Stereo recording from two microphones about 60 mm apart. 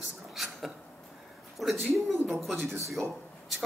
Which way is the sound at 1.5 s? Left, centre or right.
Centre.